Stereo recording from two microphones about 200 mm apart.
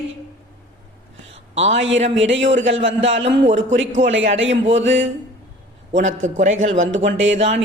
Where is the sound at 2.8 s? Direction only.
65° right (ahead or behind).